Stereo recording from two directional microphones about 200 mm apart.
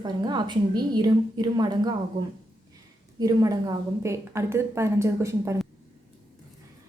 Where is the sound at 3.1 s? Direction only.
20° right (ahead or behind).